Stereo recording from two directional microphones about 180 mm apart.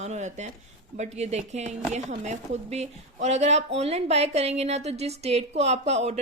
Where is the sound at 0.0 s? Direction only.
40° right (ahead or behind).